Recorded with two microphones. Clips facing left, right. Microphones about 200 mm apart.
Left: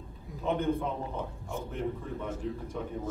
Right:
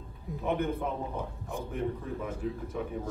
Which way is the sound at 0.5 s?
5° right (ahead or behind).